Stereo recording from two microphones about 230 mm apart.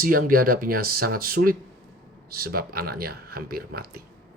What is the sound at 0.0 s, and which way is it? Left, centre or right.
Speech, right.